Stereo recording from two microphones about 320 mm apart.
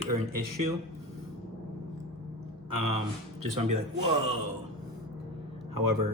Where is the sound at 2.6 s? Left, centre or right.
Right.